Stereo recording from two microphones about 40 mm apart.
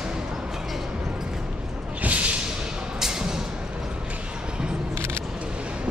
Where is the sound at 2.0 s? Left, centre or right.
Right.